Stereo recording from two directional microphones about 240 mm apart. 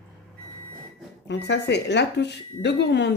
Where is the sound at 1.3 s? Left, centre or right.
Left.